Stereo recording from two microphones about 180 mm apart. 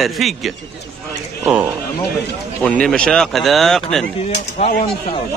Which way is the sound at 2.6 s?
5° left (ahead or behind).